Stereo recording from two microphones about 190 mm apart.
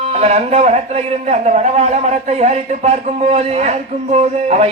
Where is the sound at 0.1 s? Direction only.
35° right (ahead or behind).